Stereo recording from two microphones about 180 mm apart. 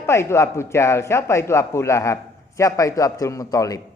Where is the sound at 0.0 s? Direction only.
15° left (ahead or behind).